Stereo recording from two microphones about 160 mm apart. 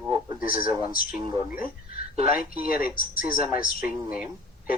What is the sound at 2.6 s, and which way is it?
Speech, 60° left (ahead or behind).